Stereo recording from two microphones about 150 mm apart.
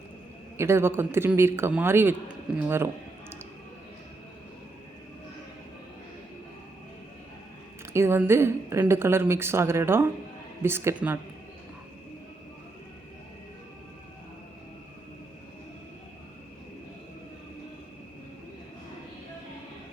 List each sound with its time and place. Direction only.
0.5 s a woman's voice: 15° right (ahead or behind)
2.6 s a sound: 15° right (ahead or behind)
7.9 s a woman's voice: 15° right (ahead or behind)